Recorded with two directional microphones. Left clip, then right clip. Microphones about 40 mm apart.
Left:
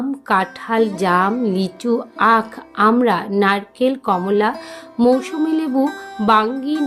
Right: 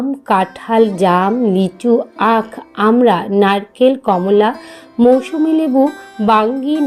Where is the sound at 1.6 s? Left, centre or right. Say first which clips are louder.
Right 6 dB; right.